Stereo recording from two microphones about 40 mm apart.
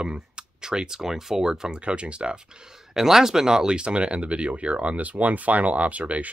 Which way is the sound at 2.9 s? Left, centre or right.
Centre.